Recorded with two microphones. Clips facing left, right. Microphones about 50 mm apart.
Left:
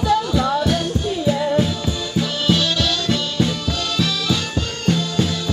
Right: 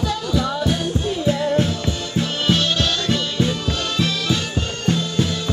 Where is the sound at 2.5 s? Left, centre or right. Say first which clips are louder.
Even; right.